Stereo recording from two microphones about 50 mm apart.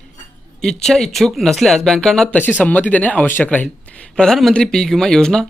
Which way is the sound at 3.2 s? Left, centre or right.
Left.